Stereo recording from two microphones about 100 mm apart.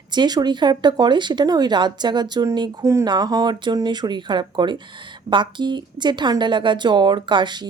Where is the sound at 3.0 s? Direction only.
45° right (ahead or behind).